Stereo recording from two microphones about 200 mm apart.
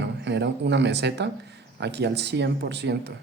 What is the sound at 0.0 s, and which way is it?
A man's voice, 60° right (ahead or behind).